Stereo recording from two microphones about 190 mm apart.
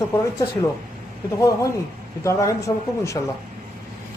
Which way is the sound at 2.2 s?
15° left (ahead or behind).